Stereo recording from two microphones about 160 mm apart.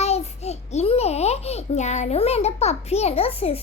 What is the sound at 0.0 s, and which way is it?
A child's voice, 40° left (ahead or behind).